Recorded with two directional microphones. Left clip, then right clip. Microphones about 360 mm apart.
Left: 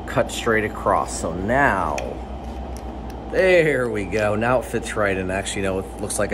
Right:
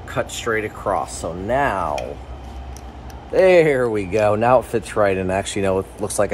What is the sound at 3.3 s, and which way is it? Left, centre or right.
Speech, centre.